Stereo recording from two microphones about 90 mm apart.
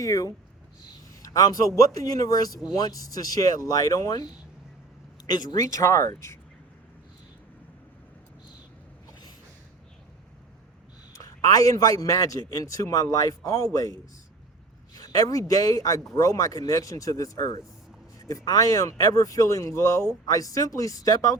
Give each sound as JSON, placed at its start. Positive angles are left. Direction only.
{"t": 0.0, "sound": "a man's voice", "side_deg": 35}
{"t": 11.2, "sound": "a man's voice", "side_deg": 40}
{"t": 14.9, "sound": "a man's voice", "side_deg": 45}